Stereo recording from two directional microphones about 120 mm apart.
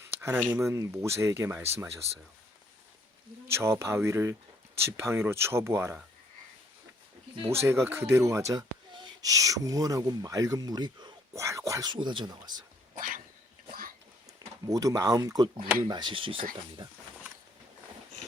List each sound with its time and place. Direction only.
0.1 s a sound: 20° right (ahead or behind)
0.5 s speech: 25° right (ahead or behind)
3.5 s speech: 20° right (ahead or behind)
7.6 s speech: 20° right (ahead or behind)
8.9 s a sound: 40° right (ahead or behind)
9.3 s speech: 30° right (ahead or behind)
11.3 s speech: 25° right (ahead or behind)
11.9 s speech: 40° right (ahead or behind)
14.7 s speech: 30° right (ahead or behind); by 16.8 s 45° right (ahead or behind)